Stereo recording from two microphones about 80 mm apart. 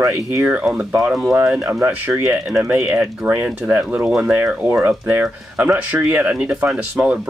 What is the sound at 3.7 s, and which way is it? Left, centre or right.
Speech, right.